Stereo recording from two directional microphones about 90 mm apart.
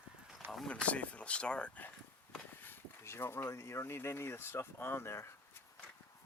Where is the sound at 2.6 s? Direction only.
25° left (ahead or behind).